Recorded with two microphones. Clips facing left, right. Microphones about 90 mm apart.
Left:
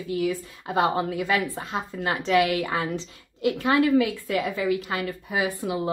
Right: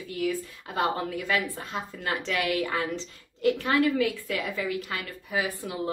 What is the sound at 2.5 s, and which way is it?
Speech, 35° left (ahead or behind).